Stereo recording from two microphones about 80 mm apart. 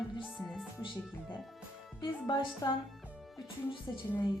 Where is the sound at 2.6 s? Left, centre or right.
Left.